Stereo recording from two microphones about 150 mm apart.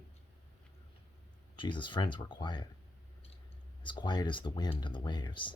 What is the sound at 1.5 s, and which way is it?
Speech, 30° left (ahead or behind).